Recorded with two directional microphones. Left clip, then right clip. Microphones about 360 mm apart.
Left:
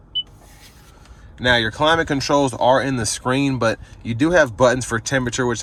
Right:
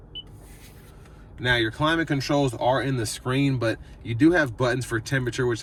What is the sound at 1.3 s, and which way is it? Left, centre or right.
Speech, centre.